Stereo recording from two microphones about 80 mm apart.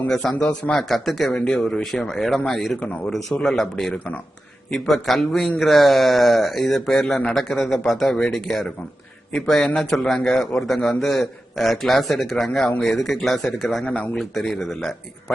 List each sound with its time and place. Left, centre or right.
0.1 s a man's voice: centre
3.9 s a man's voice: centre
4.7 s speech: centre
13.8 s a man's voice: centre
14.2 s speech: centre